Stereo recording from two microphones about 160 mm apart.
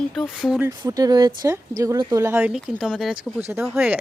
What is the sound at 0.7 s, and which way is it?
A woman's voice, 25° right (ahead or behind).